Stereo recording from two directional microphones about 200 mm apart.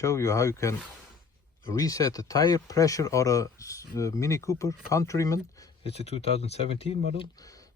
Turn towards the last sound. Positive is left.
turn(degrees=15)  # may be behind; listen again after turning